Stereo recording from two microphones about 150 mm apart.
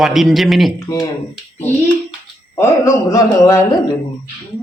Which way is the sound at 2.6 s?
20° left (ahead or behind).